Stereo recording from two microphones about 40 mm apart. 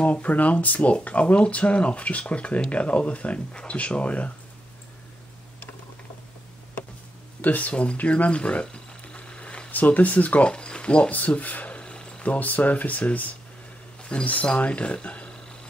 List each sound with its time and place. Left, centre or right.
0.0 s speech: left
7.4 s speech: left
7.7 s speech: left
9.1 s a sound: left
9.7 s speech: left
10.5 s a sound: left
12.3 s speech: left